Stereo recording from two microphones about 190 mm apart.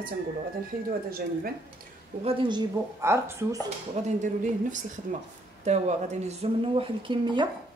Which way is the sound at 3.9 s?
40° right (ahead or behind).